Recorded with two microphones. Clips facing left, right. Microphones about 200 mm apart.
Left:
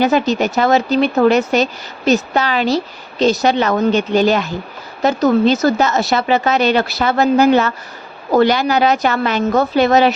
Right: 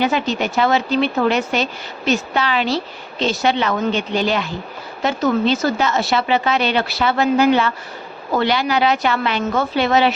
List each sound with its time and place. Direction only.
0.0 s speech: 40° left (ahead or behind)